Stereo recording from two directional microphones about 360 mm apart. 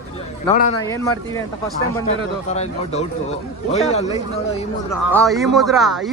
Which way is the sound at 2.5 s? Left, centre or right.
Centre.